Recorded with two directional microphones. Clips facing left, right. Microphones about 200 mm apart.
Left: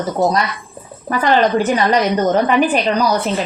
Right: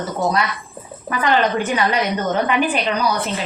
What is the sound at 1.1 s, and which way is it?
Speech, 35° left (ahead or behind).